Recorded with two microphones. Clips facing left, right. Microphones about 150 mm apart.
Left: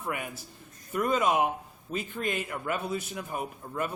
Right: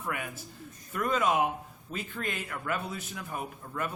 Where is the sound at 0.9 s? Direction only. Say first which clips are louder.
Left 2 dB; 20° left (ahead or behind).